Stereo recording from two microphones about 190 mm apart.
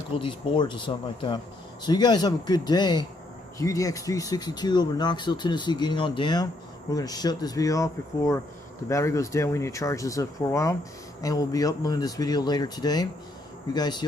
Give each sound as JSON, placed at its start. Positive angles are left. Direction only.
{"t": 0.2, "sound": "speech", "side_deg": 25}